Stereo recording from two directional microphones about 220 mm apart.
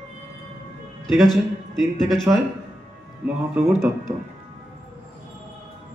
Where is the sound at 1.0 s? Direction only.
Centre (ahead or behind).